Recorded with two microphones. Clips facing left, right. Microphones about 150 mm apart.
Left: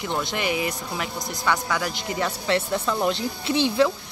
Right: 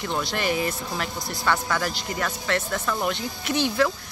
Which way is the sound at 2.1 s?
25° left (ahead or behind).